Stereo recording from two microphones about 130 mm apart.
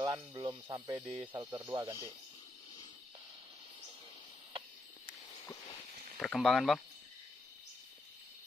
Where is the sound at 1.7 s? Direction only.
40° right (ahead or behind).